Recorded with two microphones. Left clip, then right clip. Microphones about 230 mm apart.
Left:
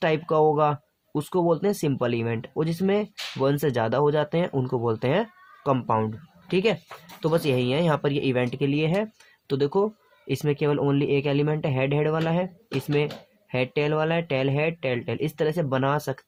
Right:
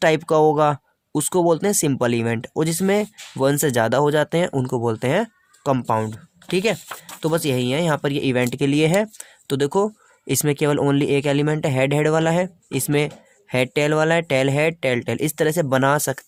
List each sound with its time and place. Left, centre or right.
0.0 s speech: right
13.5 s speech: right